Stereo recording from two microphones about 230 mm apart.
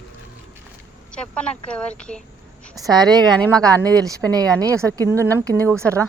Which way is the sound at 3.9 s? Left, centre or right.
Centre.